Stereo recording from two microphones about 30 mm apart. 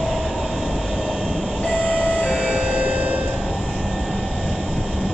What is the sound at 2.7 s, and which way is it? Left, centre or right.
Music, right.